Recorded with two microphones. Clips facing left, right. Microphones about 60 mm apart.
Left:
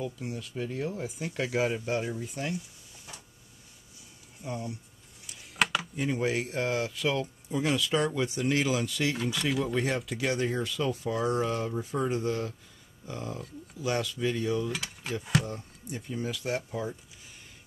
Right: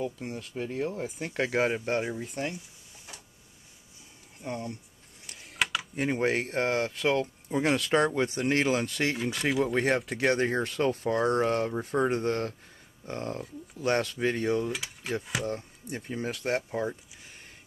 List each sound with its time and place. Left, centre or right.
0.0 s speech: right
4.4 s speech: right
5.5 s a sound: centre
5.9 s speech: right
9.7 s speech: right
14.7 s mechanisms: centre
15.4 s speech: right